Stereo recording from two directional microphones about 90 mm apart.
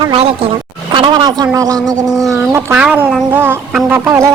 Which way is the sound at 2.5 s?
30° right (ahead or behind).